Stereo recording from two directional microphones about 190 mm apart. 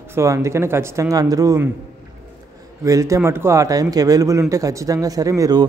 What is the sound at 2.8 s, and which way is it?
A man's voice, 15° right (ahead or behind).